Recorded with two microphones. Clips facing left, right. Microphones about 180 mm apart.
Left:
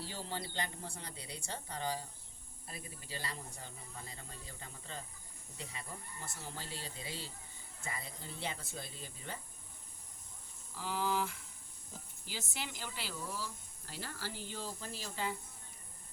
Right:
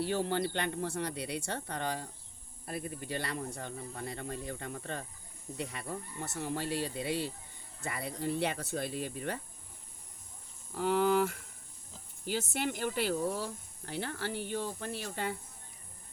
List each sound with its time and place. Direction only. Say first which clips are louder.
0.0 s speech: right 12 dB; 65° right (ahead or behind)
10.8 s speech: right 9 dB; 60° right (ahead or behind)